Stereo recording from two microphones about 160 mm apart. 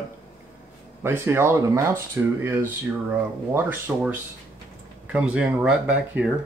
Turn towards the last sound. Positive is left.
turn(degrees=-10)  # may be behind; listen again after turning